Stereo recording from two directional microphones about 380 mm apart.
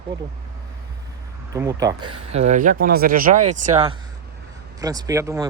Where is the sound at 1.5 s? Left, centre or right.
Centre.